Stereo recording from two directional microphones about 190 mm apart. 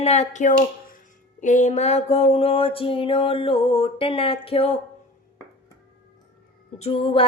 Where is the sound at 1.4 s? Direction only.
40° left (ahead or behind).